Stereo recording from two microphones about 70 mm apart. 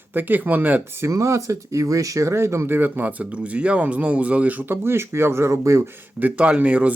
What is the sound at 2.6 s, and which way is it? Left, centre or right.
Speech, right.